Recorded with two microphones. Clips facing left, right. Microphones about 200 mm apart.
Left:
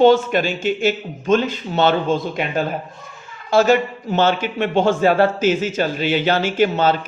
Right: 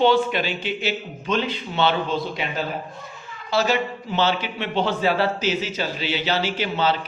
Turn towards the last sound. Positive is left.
turn(degrees=50)  # may be behind; listen again after turning